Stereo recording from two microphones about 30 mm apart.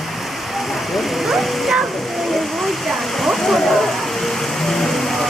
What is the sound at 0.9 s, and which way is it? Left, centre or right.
Speech, centre.